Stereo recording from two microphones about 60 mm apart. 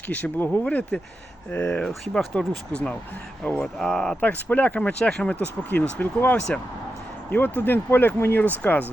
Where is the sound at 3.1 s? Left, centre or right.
Left.